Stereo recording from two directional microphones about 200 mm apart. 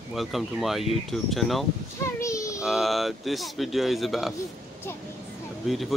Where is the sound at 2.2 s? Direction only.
15° left (ahead or behind).